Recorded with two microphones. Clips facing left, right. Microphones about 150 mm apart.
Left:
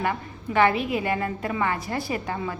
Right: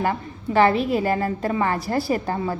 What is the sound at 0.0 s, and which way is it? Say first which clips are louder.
A woman's voice: right 3 dB; 35° right (ahead or behind).